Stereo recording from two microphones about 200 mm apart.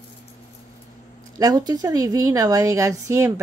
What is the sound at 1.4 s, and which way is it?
A woman's voice, 20° right (ahead or behind).